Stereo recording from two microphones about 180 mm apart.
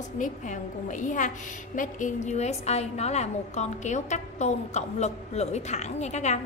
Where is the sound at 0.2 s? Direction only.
45° left (ahead or behind).